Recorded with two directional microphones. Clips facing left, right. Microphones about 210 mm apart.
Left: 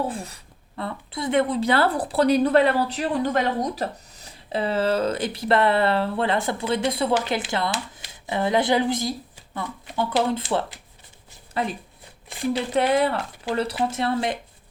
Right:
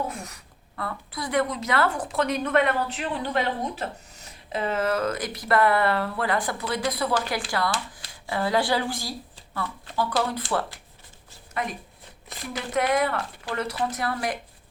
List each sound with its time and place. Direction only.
0.1 s speech: 30° left (ahead or behind)